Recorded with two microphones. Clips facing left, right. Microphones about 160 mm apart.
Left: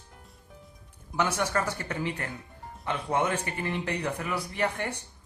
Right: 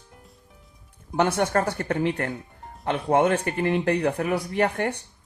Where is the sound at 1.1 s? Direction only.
55° right (ahead or behind).